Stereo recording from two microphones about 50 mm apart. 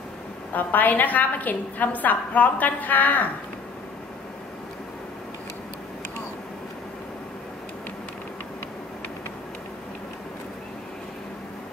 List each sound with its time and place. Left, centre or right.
0.5 s a woman's voice: left